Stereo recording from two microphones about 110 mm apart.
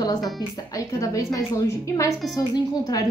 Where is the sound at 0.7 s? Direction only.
30° left (ahead or behind).